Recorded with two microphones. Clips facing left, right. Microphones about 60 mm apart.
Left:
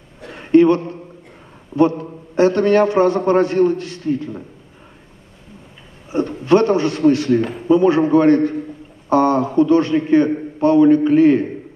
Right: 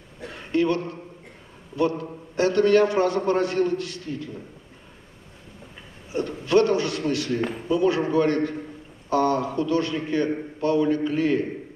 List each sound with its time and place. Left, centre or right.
0.5 s a man's voice: left
6.1 s a man's voice: left